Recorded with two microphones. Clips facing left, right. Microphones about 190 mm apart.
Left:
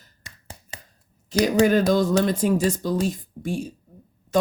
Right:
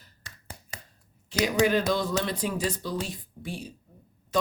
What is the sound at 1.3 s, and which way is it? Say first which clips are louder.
Speech: left 5 dB; 40° left (ahead or behind).